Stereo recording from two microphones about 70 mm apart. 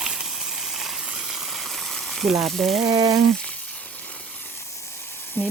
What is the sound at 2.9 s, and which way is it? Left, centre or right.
Frying, right.